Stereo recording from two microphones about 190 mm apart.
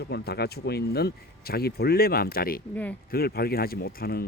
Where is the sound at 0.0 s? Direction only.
60° left (ahead or behind).